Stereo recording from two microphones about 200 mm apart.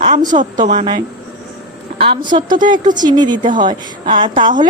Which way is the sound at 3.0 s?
20° right (ahead or behind).